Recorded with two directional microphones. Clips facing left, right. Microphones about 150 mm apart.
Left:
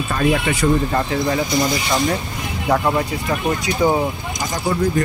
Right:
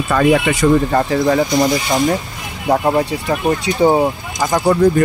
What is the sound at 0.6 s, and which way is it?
Speech, 90° right.